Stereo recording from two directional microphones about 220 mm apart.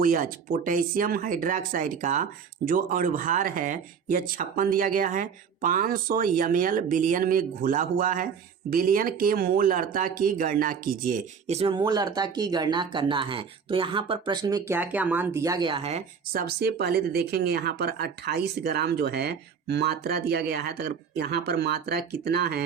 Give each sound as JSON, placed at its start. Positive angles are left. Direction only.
{"t": 0.0, "sound": "speech", "side_deg": -40}
{"t": 16.5, "sound": "speech", "side_deg": -45}